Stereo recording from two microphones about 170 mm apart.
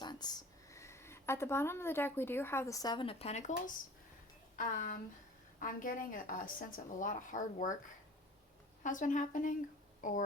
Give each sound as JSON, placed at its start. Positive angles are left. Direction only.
{"t": 0.0, "sound": "speech", "side_deg": 25}
{"t": 4.5, "sound": "a woman's voice", "side_deg": 50}
{"t": 8.8, "sound": "a woman's voice", "side_deg": 50}